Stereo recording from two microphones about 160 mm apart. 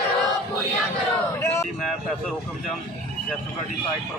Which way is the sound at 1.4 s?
15° left (ahead or behind).